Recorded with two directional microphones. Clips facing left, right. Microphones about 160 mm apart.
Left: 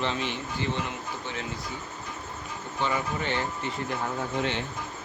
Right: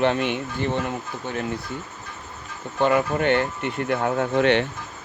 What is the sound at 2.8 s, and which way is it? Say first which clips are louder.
Speech: right 9 dB; 60° right (ahead or behind).